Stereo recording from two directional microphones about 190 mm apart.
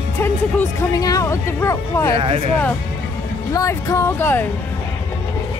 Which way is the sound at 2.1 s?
30° right (ahead or behind).